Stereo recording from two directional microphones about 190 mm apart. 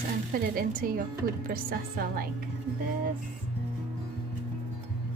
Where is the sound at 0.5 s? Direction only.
50° right (ahead or behind).